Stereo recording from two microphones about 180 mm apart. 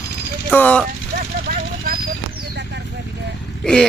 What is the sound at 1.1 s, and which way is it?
Vehicle, 60° right (ahead or behind).